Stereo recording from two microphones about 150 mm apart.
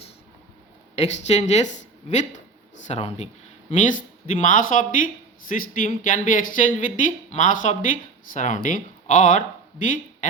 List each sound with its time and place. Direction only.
0.9 s speech: 45° left (ahead or behind)
3.7 s speech: 60° left (ahead or behind)